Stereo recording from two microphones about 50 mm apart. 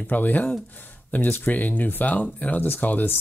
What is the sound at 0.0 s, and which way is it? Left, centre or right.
Speech, left.